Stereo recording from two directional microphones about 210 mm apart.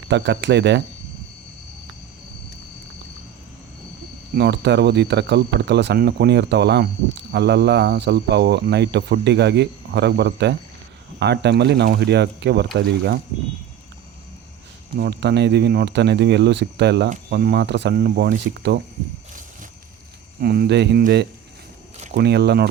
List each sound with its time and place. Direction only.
0.1 s speech: 55° right (ahead or behind)
4.4 s speech: 50° right (ahead or behind)
14.9 s speech: 50° right (ahead or behind)
20.4 s speech: 45° right (ahead or behind)